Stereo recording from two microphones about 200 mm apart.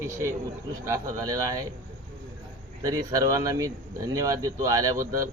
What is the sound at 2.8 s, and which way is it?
Speech, 15° right (ahead or behind).